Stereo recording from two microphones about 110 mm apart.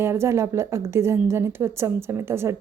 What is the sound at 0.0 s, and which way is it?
A woman's voice, 25° right (ahead or behind).